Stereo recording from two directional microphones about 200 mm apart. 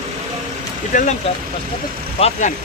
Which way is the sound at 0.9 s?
40° left (ahead or behind).